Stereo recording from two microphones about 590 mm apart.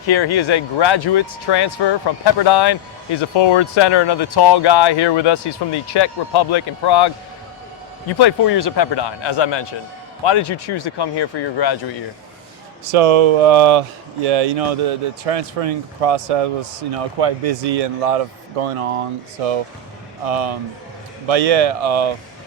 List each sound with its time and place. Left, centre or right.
0.1 s speech: left
8.2 s speech: left
12.8 s speech: right
16.9 s speech: right